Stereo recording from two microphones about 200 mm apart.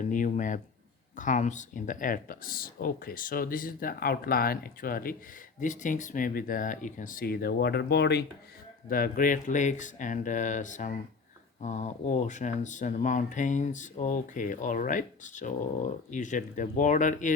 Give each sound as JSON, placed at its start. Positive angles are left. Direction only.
{"t": 0.0, "sound": "speech", "side_deg": 40}
{"t": 8.9, "sound": "speech", "side_deg": 45}